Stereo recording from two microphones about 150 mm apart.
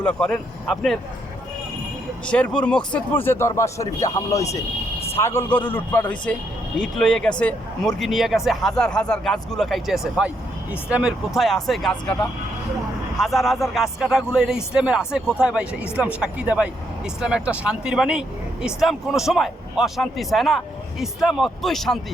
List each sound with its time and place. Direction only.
0.0 s speech: 5° left (ahead or behind)
2.2 s speech: 10° left (ahead or behind)